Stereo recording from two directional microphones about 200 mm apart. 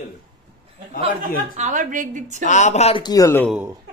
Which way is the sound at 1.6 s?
40° right (ahead or behind).